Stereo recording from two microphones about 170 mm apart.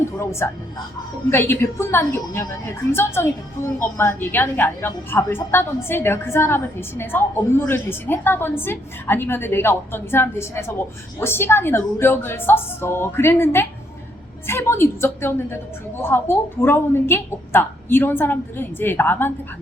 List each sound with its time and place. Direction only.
0.0 s a woman's voice: 15° left (ahead or behind)